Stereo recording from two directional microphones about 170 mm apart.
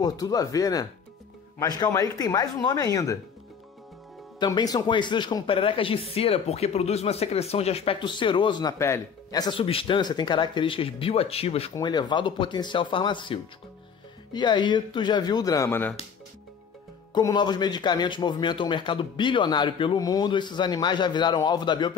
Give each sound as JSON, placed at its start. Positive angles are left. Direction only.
{"t": 0.0, "sound": "speech", "side_deg": 20}
{"t": 4.4, "sound": "speech", "side_deg": 25}
{"t": 11.7, "sound": "speech", "side_deg": 25}
{"t": 17.1, "sound": "speech", "side_deg": 25}